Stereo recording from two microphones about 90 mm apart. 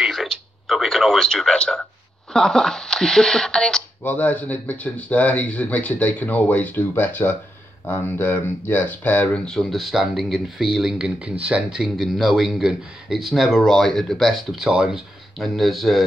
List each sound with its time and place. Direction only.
0.0 s a sound: centre (ahead or behind)
2.3 s speech: 5° left (ahead or behind)
4.0 s speech: 20° left (ahead or behind); by 16.0 s centre (ahead or behind)